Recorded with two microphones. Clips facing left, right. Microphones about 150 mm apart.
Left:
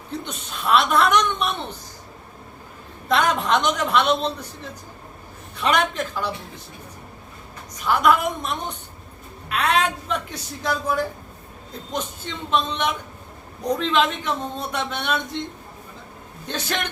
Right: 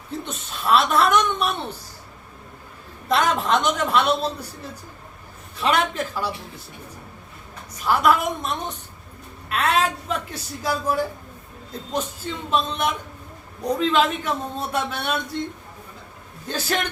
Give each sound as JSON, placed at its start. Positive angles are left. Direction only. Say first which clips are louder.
{"t": 0.3, "sound": "a woman's voice", "louder": "right 1 dB", "side_deg": 0}
{"t": 3.1, "sound": "a woman's voice", "louder": "even", "side_deg": 0}
{"t": 7.9, "sound": "a woman's voice", "louder": "even", "side_deg": 0}
{"t": 12.2, "sound": "a woman's voice", "louder": "left 2 dB", "side_deg": -5}
{"t": 16.5, "sound": "a woman's voice", "louder": "right 2 dB", "side_deg": -5}